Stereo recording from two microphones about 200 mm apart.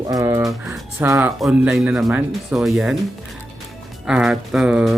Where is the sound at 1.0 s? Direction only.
15° right (ahead or behind).